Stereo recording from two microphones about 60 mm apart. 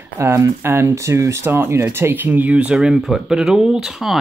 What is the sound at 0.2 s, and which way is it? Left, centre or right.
Speech, right.